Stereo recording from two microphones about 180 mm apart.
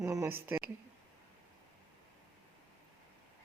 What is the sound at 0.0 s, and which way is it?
Speech, 15° right (ahead or behind).